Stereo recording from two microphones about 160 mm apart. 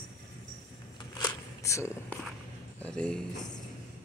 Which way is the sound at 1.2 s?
20° left (ahead or behind).